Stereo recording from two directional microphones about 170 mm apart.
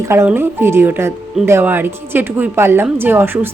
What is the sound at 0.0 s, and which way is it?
Speech, 15° right (ahead or behind).